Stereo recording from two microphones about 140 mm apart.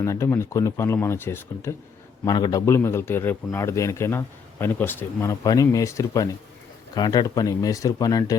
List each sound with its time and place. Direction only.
0.0 s a man's voice: 20° left (ahead or behind)
2.2 s a man's voice: 30° left (ahead or behind)